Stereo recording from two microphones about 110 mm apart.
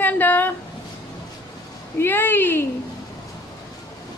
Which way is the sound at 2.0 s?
20° left (ahead or behind).